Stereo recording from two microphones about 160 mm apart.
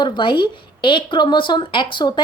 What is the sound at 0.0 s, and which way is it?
A woman's voice, 30° left (ahead or behind).